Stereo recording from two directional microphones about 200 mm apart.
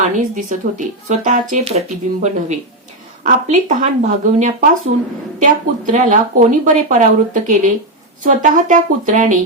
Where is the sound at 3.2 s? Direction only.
40° right (ahead or behind).